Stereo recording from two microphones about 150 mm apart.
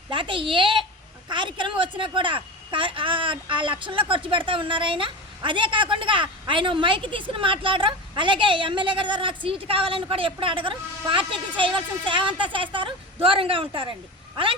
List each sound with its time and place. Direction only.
0.1 s a woman's voice: 35° right (ahead or behind)